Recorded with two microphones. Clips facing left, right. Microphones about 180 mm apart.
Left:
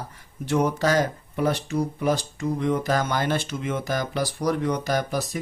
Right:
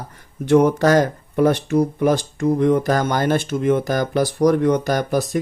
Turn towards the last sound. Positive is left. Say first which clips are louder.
# right 6 dB
turn(degrees=-50)  # may be behind; listen again after turning